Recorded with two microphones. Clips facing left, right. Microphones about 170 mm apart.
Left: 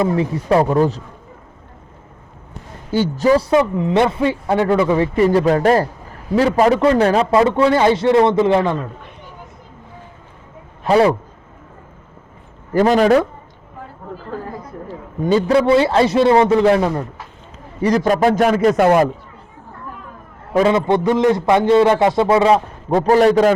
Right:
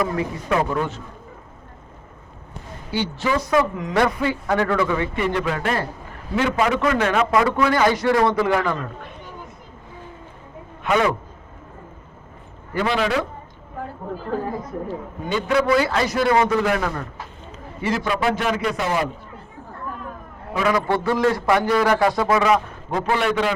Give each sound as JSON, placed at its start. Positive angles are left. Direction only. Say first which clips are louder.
{"t": 0.0, "sound": "speech", "louder": "left 6 dB", "side_deg": 30}
{"t": 2.9, "sound": "a man's voice", "louder": "left 8 dB", "side_deg": 40}
{"t": 10.8, "sound": "speech", "louder": "left 6 dB", "side_deg": 35}
{"t": 12.7, "sound": "speech", "louder": "left 9 dB", "side_deg": 45}
{"t": 15.3, "sound": "a man's voice", "louder": "left 6 dB", "side_deg": 35}
{"t": 17.8, "sound": "speech", "louder": "left 7 dB", "side_deg": 40}
{"t": 20.7, "sound": "a man's voice", "louder": "left 2 dB", "side_deg": 20}